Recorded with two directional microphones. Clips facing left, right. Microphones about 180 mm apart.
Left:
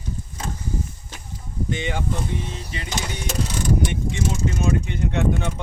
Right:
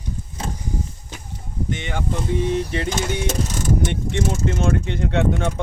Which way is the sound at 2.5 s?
65° right (ahead or behind).